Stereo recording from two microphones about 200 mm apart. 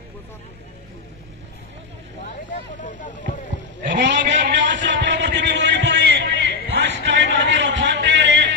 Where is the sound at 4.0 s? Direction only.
65° right (ahead or behind).